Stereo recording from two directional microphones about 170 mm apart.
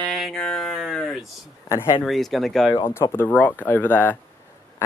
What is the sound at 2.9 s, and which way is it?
Speech, 15° left (ahead or behind).